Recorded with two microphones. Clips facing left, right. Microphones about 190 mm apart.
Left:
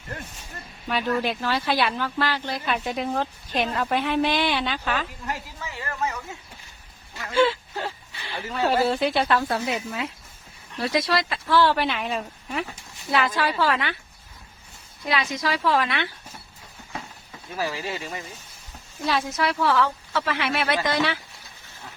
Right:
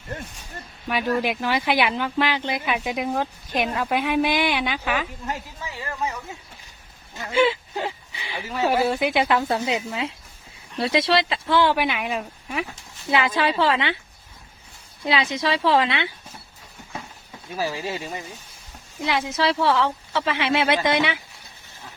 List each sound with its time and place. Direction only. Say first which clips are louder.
0.9 s speech: right 2 dB; 10° right (ahead or behind)
7.2 s speech: right 1 dB; 15° right (ahead or behind)
13.1 s a woman's voice: right 2 dB; 20° right (ahead or behind)
15.0 s a woman's voice: right 3 dB; 25° right (ahead or behind)
17.6 s a woman's voice: right 2 dB; 20° right (ahead or behind)